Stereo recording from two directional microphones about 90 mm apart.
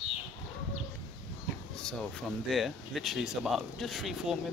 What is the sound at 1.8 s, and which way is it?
Speech, 5° left (ahead or behind).